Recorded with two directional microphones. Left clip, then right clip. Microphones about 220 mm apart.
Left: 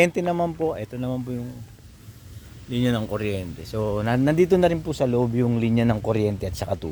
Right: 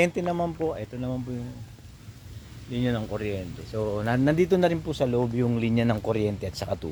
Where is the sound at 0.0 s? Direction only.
45° left (ahead or behind).